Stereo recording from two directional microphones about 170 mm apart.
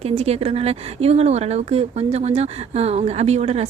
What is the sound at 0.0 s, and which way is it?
Speech, 40° right (ahead or behind).